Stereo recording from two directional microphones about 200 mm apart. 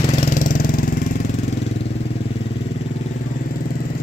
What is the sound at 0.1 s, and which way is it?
Vehicle, 35° left (ahead or behind).